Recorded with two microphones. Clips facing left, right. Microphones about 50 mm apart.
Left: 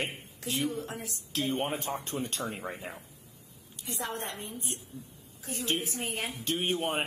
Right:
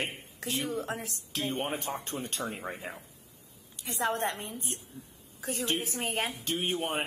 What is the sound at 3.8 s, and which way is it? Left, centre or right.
Speech, right.